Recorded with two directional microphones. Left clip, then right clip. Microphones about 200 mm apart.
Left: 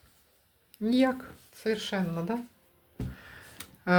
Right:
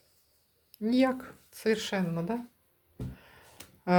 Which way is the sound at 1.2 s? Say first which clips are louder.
Right 2 dB; 20° right (ahead or behind).